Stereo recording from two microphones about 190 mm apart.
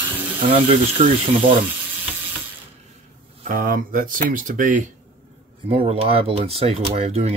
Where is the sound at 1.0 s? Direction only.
30° right (ahead or behind).